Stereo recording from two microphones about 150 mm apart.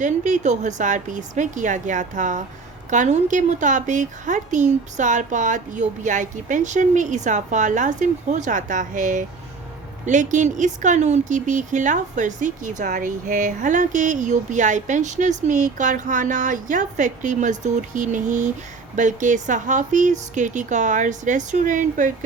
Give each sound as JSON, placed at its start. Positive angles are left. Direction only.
{"t": 0.0, "sound": "speech", "side_deg": -55}